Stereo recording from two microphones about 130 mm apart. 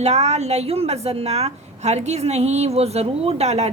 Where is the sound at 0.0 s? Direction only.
60° right (ahead or behind).